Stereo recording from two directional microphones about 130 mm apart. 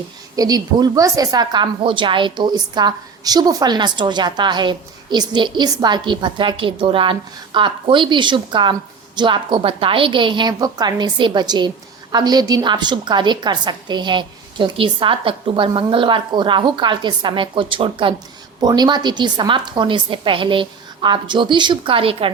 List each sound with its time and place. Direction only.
0.3 s a woman's voice: 30° right (ahead or behind)